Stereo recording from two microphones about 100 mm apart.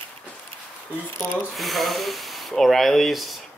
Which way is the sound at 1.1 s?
25° left (ahead or behind).